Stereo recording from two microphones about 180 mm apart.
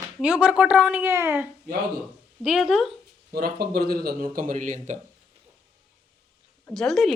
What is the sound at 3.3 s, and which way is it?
Speech, 60° right (ahead or behind).